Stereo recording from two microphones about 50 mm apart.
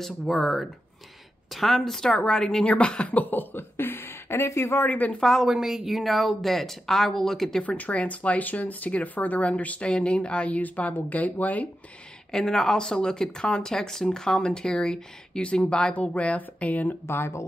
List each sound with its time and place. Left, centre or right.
0.0 s speech: centre; by 3.1 s left
3.1 s speech: left
4.7 s speech: left
5.2 s speech: centre
7.6 s speech: left
12.3 s speech: centre; by 16.9 s left
17.1 s speech: left